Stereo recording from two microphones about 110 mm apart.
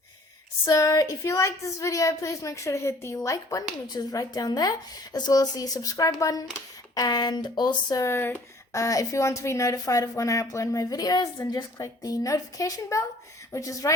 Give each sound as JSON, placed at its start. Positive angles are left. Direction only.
{"t": 0.6, "sound": "a woman's voice", "side_deg": 30}
{"t": 8.0, "sound": "a woman's voice", "side_deg": 20}
{"t": 8.7, "sound": "a woman's voice", "side_deg": 30}